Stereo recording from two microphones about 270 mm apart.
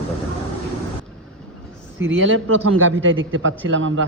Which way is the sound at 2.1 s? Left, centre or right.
Right.